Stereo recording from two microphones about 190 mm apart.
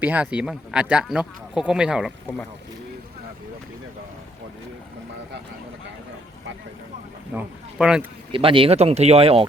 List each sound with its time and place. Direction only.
0.0 s speech: 10° right (ahead or behind)
7.3 s speech: 5° right (ahead or behind)
8.3 s speech: 30° right (ahead or behind)